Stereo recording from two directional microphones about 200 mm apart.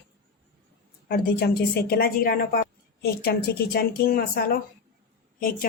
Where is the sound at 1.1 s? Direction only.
50° left (ahead or behind).